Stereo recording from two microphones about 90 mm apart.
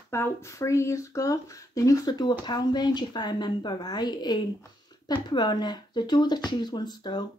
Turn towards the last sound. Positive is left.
turn(degrees=50)  # may be behind; listen again after turning